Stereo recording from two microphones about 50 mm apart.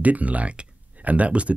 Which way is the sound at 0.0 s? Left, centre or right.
Right.